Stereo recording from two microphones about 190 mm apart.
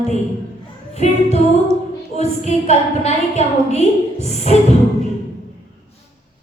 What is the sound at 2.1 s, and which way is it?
A woman's voice, 35° left (ahead or behind).